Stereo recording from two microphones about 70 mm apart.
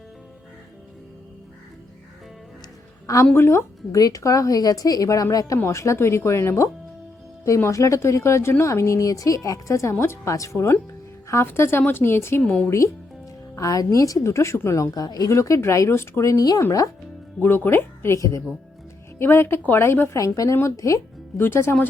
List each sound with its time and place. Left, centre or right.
3.3 s speech: left
3.9 s a woman's voice: left
5.6 s speech: left
7.7 s speech: left
12.4 s speech: centre
13.6 s speech: left
14.9 s a woman's voice: left
15.3 s speech: left
16.3 s a woman's voice: left
17.4 s speech: left
19.2 s speech: left
20.1 s speech: left
21.3 s speech: left